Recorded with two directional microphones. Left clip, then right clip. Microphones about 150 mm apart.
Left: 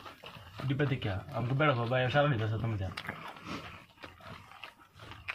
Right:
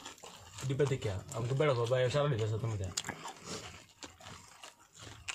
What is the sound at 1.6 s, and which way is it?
Speech, 35° right (ahead or behind).